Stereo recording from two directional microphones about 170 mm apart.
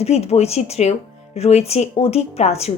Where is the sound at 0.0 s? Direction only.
40° left (ahead or behind).